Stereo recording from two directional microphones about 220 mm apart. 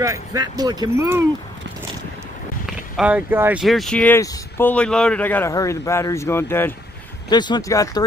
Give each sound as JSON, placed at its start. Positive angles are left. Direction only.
{"t": 0.0, "sound": "speech", "side_deg": -15}
{"t": 3.0, "sound": "speech", "side_deg": -5}